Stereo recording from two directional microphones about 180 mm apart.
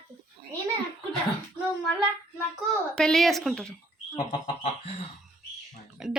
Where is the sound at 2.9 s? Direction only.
5° left (ahead or behind).